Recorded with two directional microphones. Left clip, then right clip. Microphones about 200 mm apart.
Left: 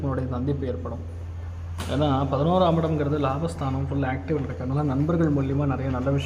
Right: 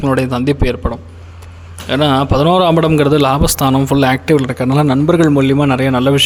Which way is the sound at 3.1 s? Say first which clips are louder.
Right 14 dB; 65° right (ahead or behind).